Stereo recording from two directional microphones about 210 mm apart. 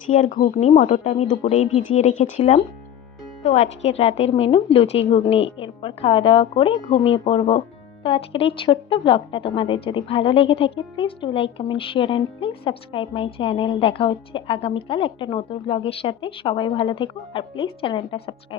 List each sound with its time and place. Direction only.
0.1 s speech: 35° left (ahead or behind)
3.4 s a woman's voice: 30° left (ahead or behind)